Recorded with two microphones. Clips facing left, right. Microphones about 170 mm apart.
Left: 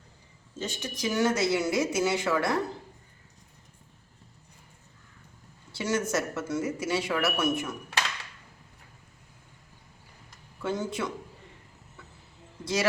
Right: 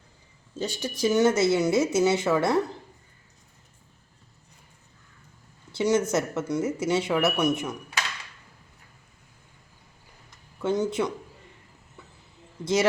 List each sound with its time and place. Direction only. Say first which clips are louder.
0.6 s speech: right 6 dB; 35° right (ahead or behind)
5.7 s speech: right 5 dB; 20° right (ahead or behind)
10.6 s speech: right 6 dB; 20° right (ahead or behind)
12.6 s speech: right 4 dB; 20° right (ahead or behind)